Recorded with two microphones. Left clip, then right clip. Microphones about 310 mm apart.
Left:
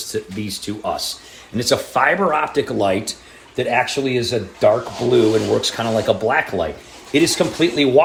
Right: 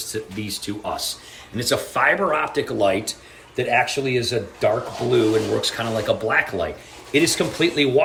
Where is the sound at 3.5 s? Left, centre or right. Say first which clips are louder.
Left 2 dB; left.